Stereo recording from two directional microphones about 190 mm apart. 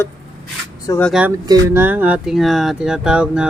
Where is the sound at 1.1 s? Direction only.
5° right (ahead or behind).